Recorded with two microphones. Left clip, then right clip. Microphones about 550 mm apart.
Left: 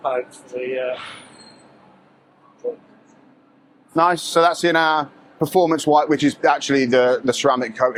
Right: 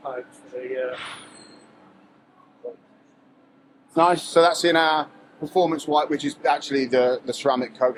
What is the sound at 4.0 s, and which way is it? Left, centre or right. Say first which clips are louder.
A man's voice: left 1 dB; centre.